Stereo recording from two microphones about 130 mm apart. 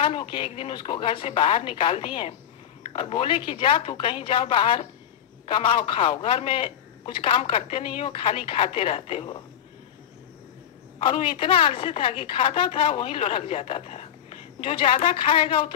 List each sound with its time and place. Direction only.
0.0 s a woman's voice: 40° left (ahead or behind)
11.0 s a woman's voice: 45° left (ahead or behind)